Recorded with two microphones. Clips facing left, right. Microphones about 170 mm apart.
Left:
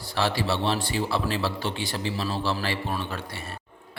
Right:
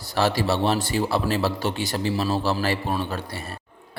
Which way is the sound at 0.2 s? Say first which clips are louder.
Right 4 dB; 45° right (ahead or behind).